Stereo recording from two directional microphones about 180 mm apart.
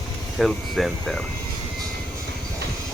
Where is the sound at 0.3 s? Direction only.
Centre (ahead or behind).